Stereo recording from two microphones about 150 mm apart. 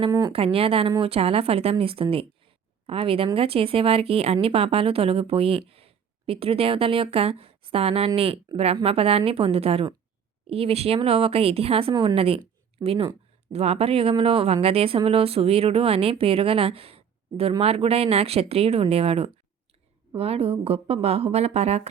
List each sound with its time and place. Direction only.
0.1 s speech: 25° right (ahead or behind)
0.3 s a woman's voice: 40° right (ahead or behind)